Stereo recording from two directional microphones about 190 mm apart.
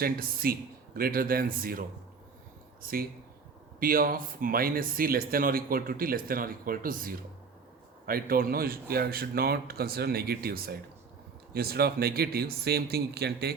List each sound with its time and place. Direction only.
0.0 s speech: 50° right (ahead or behind)
2.8 s speech: 50° right (ahead or behind)